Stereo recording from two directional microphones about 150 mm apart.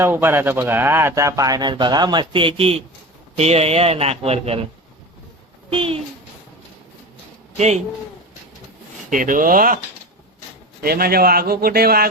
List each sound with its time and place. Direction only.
0.0 s speech: 15° right (ahead or behind); by 4.6 s 40° right (ahead or behind)
5.7 s speech: 40° right (ahead or behind)
9.0 s speech: 65° right (ahead or behind)
10.8 s speech: 90° right